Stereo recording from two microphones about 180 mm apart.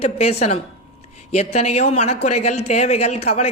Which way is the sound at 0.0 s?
35° left (ahead or behind).